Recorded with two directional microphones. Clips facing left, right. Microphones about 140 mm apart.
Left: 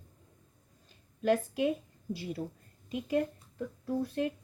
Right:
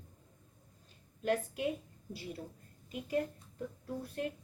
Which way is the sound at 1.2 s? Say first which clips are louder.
Left 5 dB; 90° left.